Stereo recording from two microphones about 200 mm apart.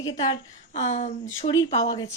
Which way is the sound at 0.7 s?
35° left (ahead or behind).